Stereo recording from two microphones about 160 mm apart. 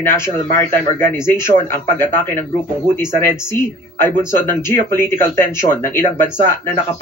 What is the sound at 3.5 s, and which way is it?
A man's voice, 15° left (ahead or behind).